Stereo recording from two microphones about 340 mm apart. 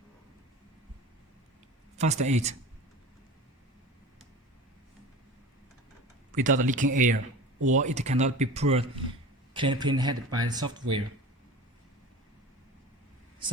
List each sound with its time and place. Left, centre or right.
2.0 s speech: centre
6.3 s speech: right